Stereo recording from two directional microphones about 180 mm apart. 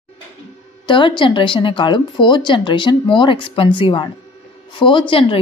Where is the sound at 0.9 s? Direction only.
25° left (ahead or behind).